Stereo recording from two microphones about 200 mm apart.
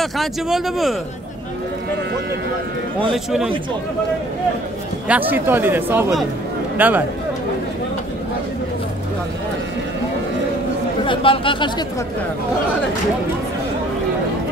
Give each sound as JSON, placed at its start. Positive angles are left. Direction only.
{"t": 0.0, "sound": "speech", "side_deg": 0}
{"t": 3.0, "sound": "speech", "side_deg": 0}
{"t": 5.0, "sound": "speech", "side_deg": -10}
{"t": 11.1, "sound": "speech", "side_deg": 25}